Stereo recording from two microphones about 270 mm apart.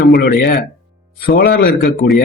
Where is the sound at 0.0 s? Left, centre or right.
Left.